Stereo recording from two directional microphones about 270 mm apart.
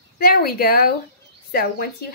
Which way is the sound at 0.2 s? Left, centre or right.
Left.